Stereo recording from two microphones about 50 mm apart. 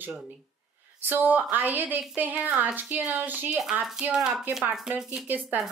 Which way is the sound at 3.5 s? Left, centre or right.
Centre.